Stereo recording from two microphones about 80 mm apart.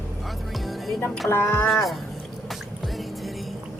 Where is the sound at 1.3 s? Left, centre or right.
Left.